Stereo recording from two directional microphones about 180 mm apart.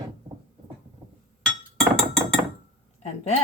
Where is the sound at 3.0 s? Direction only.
40° left (ahead or behind).